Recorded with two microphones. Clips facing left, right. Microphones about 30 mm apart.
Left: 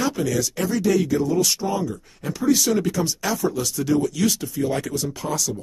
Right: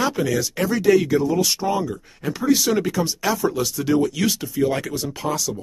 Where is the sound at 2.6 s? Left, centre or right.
Centre.